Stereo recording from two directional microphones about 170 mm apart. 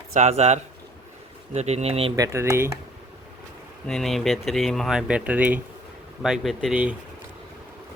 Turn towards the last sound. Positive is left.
turn(degrees=-5)  # may be behind; listen again after turning